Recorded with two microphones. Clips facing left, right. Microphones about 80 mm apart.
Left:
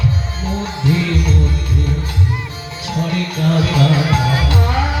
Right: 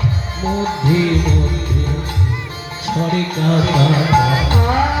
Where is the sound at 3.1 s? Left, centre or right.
Right.